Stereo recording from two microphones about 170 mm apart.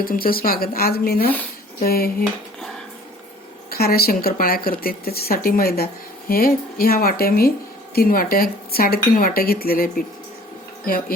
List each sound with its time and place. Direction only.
0.0 s speech: 60° left (ahead or behind)
3.7 s speech: 65° left (ahead or behind)